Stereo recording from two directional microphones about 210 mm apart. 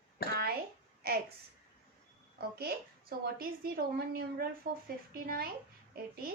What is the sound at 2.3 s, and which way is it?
A woman's voice, 45° right (ahead or behind).